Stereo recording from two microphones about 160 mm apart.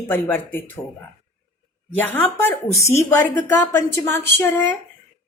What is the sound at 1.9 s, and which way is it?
A woman's voice, 10° left (ahead or behind).